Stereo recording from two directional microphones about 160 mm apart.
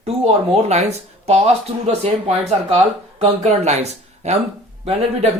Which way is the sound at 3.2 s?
45° right (ahead or behind).